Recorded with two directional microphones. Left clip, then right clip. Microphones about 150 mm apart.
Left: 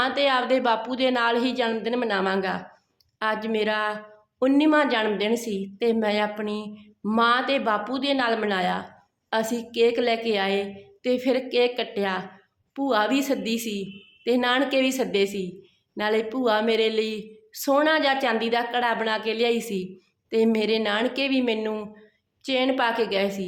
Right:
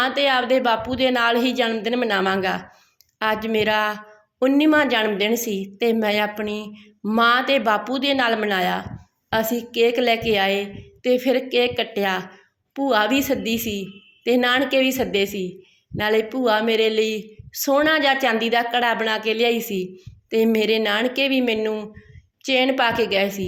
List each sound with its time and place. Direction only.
0.0 s a woman's voice: 10° right (ahead or behind)